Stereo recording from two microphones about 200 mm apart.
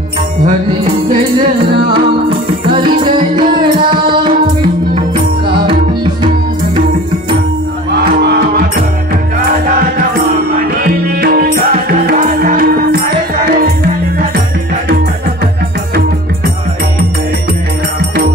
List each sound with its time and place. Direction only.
1.9 s music: 25° right (ahead or behind)
7.9 s music: 55° right (ahead or behind)
10.8 s music: 50° right (ahead or behind)